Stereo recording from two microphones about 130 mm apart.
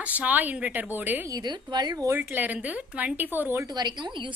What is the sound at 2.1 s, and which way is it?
A woman's voice, 15° right (ahead or behind).